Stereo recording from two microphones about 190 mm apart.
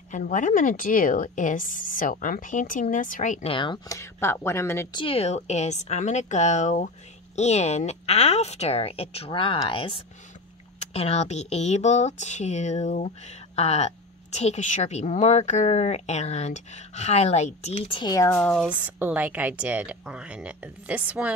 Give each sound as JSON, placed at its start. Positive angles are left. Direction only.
{"t": 0.1, "sound": "a woman's voice", "side_deg": 40}
{"t": 3.4, "sound": "speech", "side_deg": 25}
{"t": 4.9, "sound": "a woman's voice", "side_deg": 30}